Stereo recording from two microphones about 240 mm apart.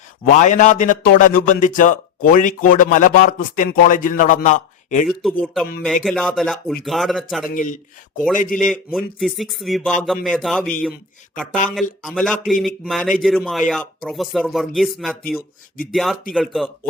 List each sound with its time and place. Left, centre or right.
0.3 s a man's voice: left
5.0 s a man's voice: centre
7.5 s a man's voice: left
8.5 s a man's voice: centre